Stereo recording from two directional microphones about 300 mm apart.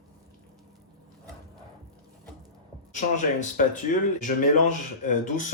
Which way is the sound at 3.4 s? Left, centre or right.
Left.